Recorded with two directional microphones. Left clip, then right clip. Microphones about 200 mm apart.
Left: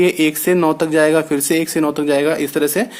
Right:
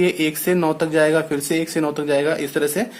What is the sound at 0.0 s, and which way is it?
Speech, 30° left (ahead or behind).